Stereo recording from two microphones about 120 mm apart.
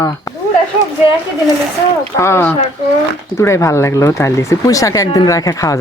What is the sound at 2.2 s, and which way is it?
Speech, 20° left (ahead or behind).